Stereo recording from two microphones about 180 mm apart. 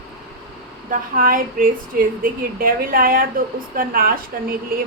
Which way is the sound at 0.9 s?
50° right (ahead or behind).